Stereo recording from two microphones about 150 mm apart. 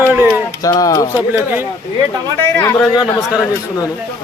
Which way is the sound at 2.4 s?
20° left (ahead or behind).